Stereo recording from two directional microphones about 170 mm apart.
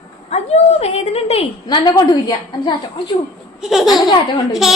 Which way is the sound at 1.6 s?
25° left (ahead or behind).